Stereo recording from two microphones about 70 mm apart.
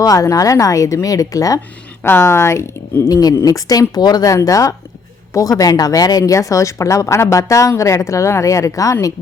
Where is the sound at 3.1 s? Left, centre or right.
Left.